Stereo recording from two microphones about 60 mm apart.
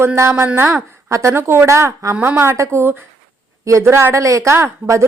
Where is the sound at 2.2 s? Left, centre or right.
Right.